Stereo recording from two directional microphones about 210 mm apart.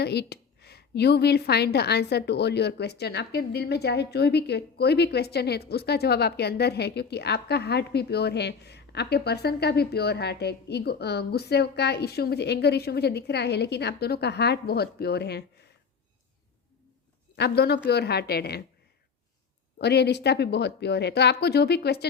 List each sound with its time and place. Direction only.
0.0 s a woman's voice: 50° left (ahead or behind)
17.3 s a woman's voice: 50° left (ahead or behind)
19.8 s a woman's voice: 50° left (ahead or behind)